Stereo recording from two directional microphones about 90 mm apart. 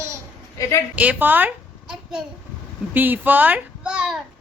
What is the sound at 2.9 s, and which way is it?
A child's voice, 20° right (ahead or behind).